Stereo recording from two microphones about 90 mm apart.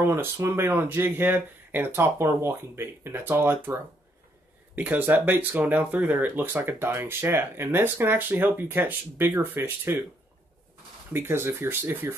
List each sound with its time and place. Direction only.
0.0 s speech: 30° right (ahead or behind)
11.1 s speech: 25° right (ahead or behind)